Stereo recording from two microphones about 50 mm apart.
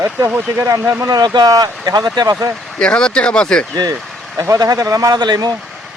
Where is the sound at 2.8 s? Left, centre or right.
Centre.